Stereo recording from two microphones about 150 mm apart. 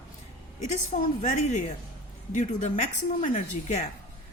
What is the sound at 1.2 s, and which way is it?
A woman's voice, 50° left (ahead or behind).